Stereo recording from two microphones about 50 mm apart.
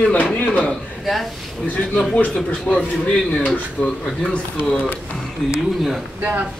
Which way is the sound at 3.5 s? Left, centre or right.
Centre.